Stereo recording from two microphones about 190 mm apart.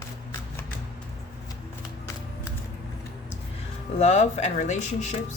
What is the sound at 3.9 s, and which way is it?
Speech, 35° left (ahead or behind).